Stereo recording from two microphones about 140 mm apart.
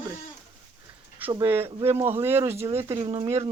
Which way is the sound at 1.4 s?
15° right (ahead or behind).